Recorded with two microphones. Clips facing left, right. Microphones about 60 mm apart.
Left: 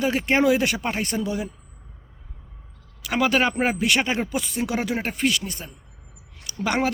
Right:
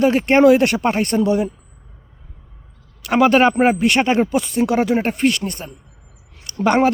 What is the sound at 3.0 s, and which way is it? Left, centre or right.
A man's voice, right.